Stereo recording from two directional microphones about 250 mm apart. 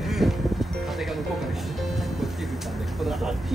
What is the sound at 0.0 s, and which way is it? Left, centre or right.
Music, centre.